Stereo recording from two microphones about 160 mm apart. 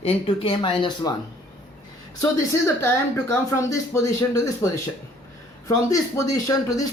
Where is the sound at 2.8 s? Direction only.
15° left (ahead or behind).